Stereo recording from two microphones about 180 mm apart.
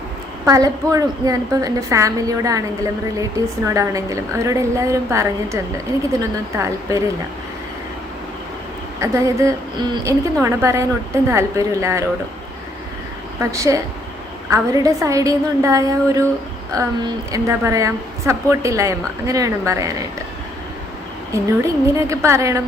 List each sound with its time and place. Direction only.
0.4 s a woman's voice: 20° right (ahead or behind)
9.0 s a woman's voice: 15° right (ahead or behind)
13.4 s a woman's voice: 15° right (ahead or behind)
21.3 s a woman's voice: 15° right (ahead or behind)